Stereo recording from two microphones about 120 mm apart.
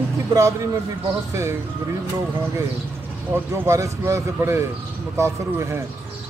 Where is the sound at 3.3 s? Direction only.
20° right (ahead or behind).